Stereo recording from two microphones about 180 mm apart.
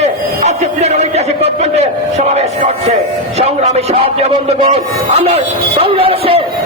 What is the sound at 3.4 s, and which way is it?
Speech, 35° right (ahead or behind).